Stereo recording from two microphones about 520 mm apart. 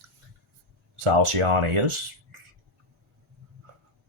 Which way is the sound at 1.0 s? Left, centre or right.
Right.